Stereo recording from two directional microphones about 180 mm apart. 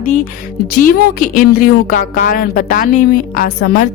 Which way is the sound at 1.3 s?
50° left (ahead or behind).